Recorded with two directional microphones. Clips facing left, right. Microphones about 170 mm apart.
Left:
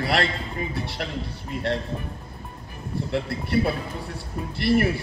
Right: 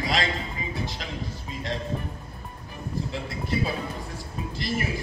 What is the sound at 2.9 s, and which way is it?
Speech, 65° left (ahead or behind).